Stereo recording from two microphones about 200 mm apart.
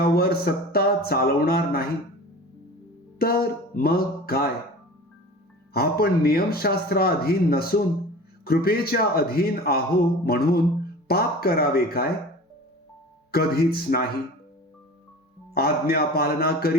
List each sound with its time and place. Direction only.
0.0 s music: 50° left (ahead or behind)
3.2 s a sound: 50° left (ahead or behind)
5.7 s speech: 50° left (ahead or behind)
13.3 s speech: 50° left (ahead or behind)
15.5 s speech: 50° left (ahead or behind)